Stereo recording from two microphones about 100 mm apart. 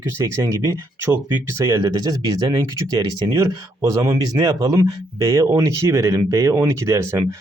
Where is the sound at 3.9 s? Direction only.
35° right (ahead or behind).